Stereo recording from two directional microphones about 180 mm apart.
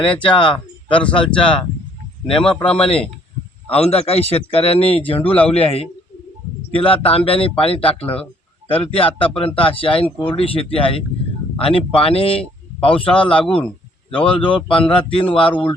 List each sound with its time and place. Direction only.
0.0 s speech: 25° left (ahead or behind)
1.0 s speech: 5° left (ahead or behind)
2.6 s speech: 30° left (ahead or behind)